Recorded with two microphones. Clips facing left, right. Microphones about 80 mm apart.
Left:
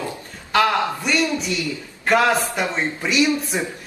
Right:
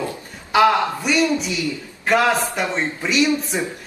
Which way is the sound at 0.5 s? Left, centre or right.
Centre.